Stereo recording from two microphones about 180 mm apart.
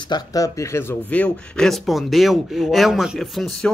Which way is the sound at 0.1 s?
20° left (ahead or behind).